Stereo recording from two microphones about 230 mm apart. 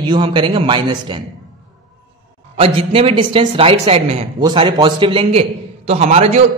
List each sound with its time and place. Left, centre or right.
0.0 s speech: centre
2.5 s speech: right